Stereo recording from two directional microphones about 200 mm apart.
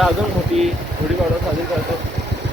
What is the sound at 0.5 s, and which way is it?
Speech, 30° right (ahead or behind).